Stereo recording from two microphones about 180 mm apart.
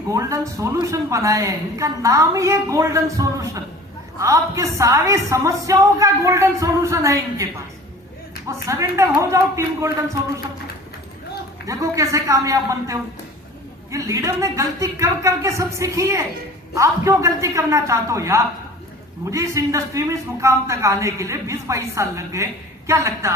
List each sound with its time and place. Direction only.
0.1 s a woman's voice: 15° right (ahead or behind)
8.4 s a woman's voice: 15° right (ahead or behind)
11.6 s a woman's voice: 15° right (ahead or behind)